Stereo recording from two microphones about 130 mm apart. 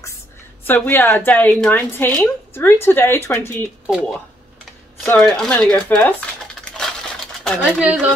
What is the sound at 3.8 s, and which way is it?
Speech, 5° right (ahead or behind).